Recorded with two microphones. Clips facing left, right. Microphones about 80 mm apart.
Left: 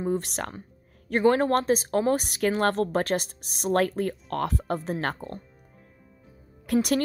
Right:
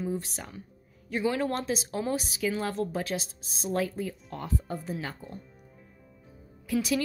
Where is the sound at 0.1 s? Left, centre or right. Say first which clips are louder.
Left 6 dB; left.